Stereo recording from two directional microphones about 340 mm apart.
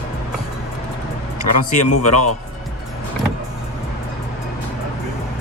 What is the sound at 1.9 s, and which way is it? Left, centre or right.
Speech, left.